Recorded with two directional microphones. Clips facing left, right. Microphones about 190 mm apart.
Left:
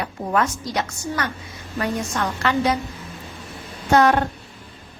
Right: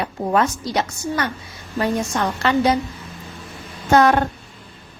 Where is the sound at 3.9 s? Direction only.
45° right (ahead or behind).